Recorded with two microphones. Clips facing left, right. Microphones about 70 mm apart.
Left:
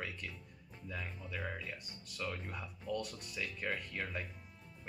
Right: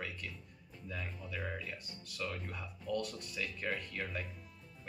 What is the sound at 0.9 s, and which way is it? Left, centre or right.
Speech, centre.